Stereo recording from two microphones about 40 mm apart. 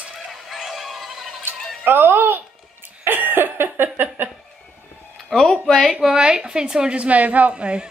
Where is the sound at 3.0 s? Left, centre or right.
Right.